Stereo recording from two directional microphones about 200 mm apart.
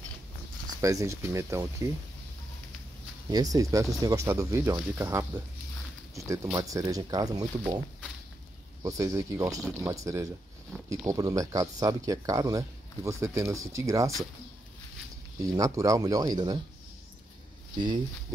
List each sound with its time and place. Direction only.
0.7 s speech: 15° right (ahead or behind)
3.3 s speech: 20° right (ahead or behind)
8.8 s speech: 15° right (ahead or behind)
10.7 s speech: centre (ahead or behind)
11.1 s speech: 15° right (ahead or behind)
15.4 s speech: 15° right (ahead or behind)
17.7 s speech: 20° right (ahead or behind)